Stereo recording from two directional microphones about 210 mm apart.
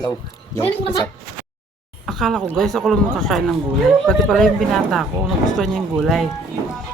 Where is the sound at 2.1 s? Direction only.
Centre (ahead or behind).